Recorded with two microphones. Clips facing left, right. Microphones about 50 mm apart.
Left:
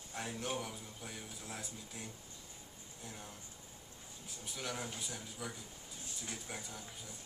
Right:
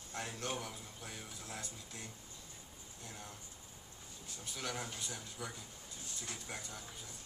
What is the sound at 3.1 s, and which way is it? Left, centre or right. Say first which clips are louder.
Speech: even; centre.